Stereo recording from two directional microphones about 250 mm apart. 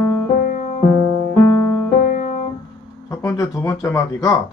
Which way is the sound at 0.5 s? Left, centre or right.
Left.